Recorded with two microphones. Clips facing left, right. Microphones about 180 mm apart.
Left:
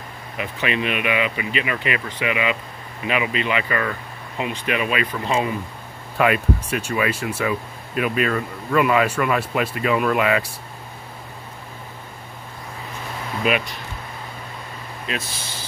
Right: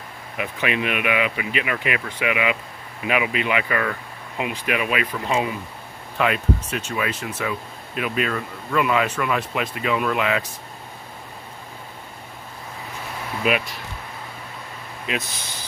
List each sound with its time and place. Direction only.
0.4 s speech: 10° right (ahead or behind)
13.4 s speech: centre (ahead or behind)
15.0 s speech: 15° right (ahead or behind)